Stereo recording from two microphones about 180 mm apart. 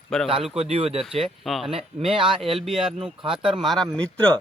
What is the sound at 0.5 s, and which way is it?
Speech, 30° right (ahead or behind).